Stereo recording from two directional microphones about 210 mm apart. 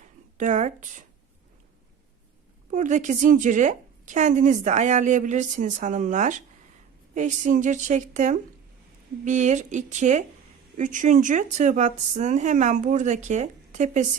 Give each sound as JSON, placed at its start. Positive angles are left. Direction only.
{"t": 0.3, "sound": "a woman's voice", "side_deg": -35}
{"t": 2.6, "sound": "a woman's voice", "side_deg": -35}